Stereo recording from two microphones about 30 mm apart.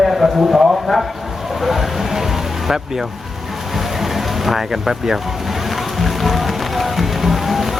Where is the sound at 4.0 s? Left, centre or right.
Centre.